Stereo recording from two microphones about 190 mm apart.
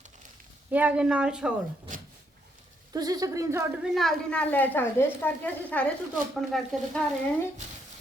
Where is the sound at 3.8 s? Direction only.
Centre (ahead or behind).